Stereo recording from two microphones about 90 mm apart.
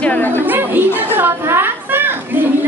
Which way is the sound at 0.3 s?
25° right (ahead or behind).